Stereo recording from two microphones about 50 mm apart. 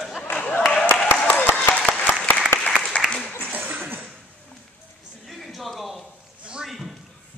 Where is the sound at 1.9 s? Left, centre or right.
Left.